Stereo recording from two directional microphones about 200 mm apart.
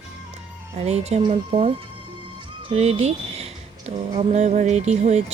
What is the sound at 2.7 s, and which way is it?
Speech, 30° right (ahead or behind).